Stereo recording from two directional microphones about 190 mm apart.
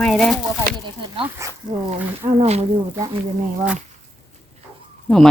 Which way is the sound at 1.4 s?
15° right (ahead or behind).